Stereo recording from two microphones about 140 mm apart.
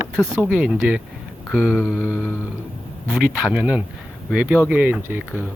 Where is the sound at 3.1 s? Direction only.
5° right (ahead or behind).